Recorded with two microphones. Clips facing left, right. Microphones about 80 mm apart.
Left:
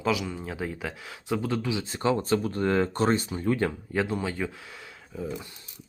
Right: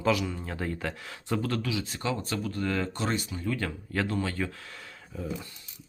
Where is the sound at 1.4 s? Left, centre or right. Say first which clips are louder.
Left 2 dB; centre.